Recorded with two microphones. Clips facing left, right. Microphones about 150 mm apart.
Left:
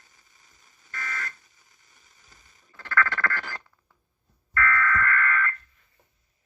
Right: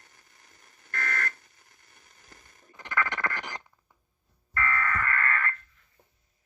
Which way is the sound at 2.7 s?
20° right (ahead or behind).